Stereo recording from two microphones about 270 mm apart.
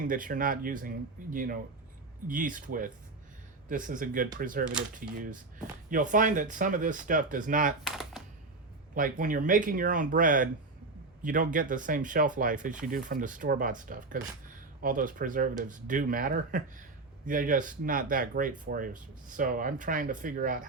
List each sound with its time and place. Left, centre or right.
0.0 s speech: right
7.9 s computer keyboard: centre
9.0 s speech: right